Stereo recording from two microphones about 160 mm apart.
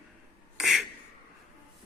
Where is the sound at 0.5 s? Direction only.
Centre (ahead or behind).